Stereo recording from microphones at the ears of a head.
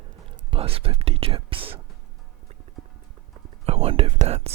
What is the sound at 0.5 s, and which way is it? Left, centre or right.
Speech, right.